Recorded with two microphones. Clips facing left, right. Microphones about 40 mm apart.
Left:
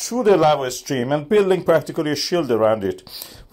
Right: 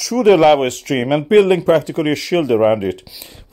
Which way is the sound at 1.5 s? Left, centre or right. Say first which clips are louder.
Right 3 dB; right.